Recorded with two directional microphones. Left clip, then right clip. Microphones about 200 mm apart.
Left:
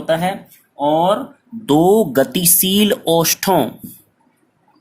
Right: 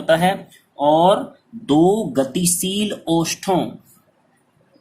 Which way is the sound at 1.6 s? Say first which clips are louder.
Left 3 dB; 40° left (ahead or behind).